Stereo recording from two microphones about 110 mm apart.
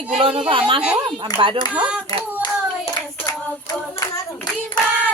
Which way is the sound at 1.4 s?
55° right (ahead or behind).